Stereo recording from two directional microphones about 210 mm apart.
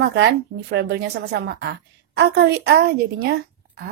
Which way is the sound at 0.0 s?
50° right (ahead or behind).